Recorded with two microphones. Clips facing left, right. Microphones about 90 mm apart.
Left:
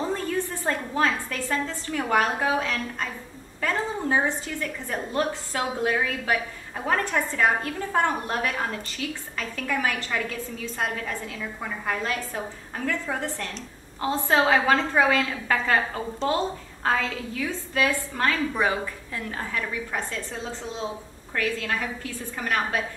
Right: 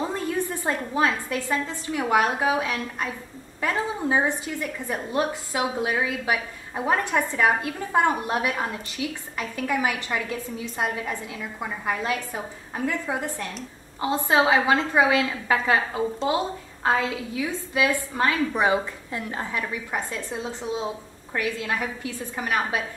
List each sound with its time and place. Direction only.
0.3 s a woman's voice: 15° right (ahead or behind)